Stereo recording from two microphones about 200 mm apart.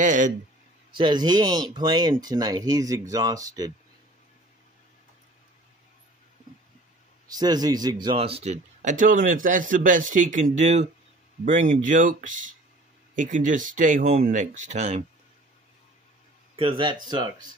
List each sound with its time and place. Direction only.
0.0 s speech: 40° right (ahead or behind)
0.9 s speech: 20° right (ahead or behind)
7.3 s speech: 20° right (ahead or behind)
16.5 s speech: 25° right (ahead or behind)